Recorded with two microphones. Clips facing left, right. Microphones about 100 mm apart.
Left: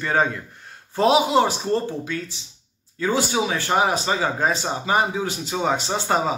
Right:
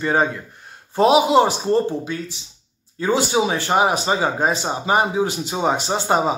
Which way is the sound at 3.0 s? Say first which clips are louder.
Right 3 dB; 25° right (ahead or behind).